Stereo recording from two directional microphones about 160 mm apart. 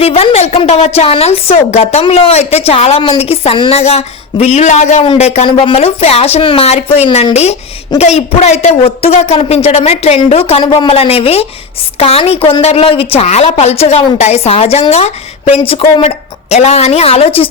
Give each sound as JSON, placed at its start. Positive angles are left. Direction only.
{"t": 0.0, "sound": "a woman's voice", "side_deg": 40}